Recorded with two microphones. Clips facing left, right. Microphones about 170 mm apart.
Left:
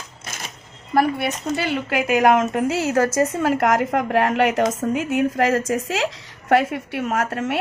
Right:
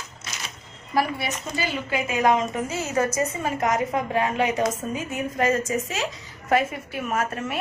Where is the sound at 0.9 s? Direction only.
60° left (ahead or behind).